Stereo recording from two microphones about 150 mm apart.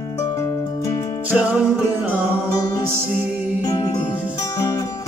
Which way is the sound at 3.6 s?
25° left (ahead or behind).